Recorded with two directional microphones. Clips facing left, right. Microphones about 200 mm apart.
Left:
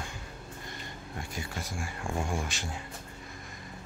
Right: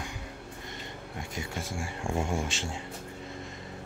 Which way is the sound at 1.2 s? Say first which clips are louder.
Right 2 dB; 20° right (ahead or behind).